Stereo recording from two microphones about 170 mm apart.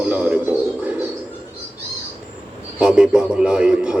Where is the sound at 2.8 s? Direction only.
5° right (ahead or behind).